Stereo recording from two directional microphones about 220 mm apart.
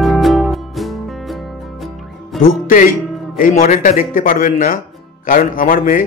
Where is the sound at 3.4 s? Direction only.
40° left (ahead or behind).